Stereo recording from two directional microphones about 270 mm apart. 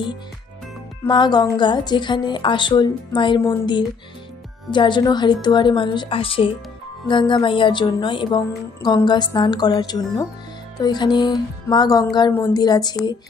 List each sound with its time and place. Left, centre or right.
1.0 s music: centre